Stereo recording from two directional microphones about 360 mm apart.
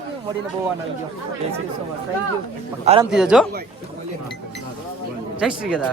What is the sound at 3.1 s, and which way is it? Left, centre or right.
Speech, centre.